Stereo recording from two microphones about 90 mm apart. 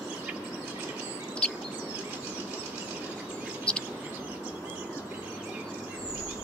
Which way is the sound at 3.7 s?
10° left (ahead or behind).